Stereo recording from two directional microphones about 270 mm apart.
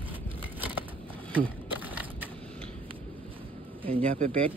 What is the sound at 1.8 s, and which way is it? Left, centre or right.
Crushing, centre.